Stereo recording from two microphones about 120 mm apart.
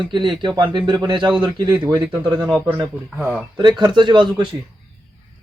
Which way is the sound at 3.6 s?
40° right (ahead or behind).